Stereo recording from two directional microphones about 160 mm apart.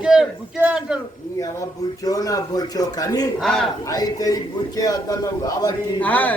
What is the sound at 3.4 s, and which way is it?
Speech, centre (ahead or behind).